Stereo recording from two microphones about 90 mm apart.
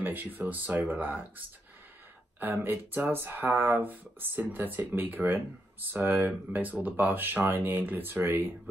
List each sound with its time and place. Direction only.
0.0 s speech: 20° right (ahead or behind)
2.4 s speech: 20° right (ahead or behind)